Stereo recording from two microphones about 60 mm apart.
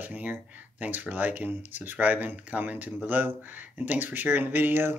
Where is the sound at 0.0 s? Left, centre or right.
Right.